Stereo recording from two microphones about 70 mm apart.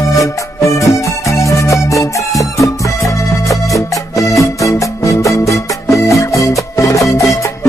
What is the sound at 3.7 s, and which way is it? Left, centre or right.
Music, left.